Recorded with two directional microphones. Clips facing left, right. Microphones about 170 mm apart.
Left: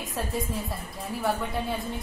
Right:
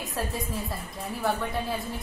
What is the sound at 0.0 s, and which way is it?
A woman's voice, centre (ahead or behind).